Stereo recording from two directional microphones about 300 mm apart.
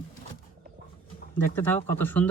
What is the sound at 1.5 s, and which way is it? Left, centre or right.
Speech, centre.